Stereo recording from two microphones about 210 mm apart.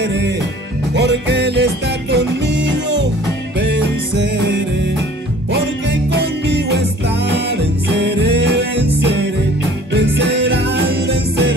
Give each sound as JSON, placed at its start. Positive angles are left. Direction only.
{"t": 0.0, "sound": "music", "side_deg": -55}
{"t": 6.1, "sound": "music", "side_deg": -55}